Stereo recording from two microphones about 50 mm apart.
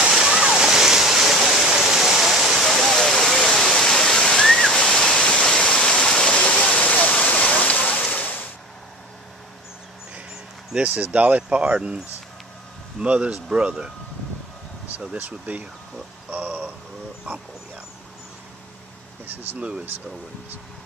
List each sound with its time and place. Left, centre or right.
0.1 s waterfall: centre; by 8.0 s left
8.1 s a sound: left
10.8 s speech: right
13.0 s speech: right
15.1 s speech: right
16.3 s a sound: right
19.2 s speech: right